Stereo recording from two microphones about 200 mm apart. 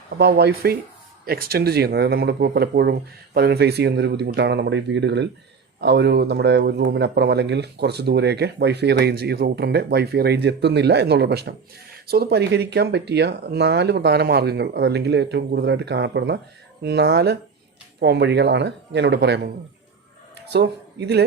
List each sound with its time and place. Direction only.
0.2 s a man's voice: 55° right (ahead or behind)